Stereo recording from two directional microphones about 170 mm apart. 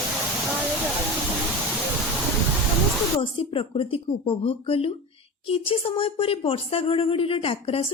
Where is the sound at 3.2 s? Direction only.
30° left (ahead or behind).